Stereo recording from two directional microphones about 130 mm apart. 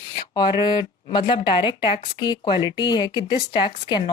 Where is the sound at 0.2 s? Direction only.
35° left (ahead or behind).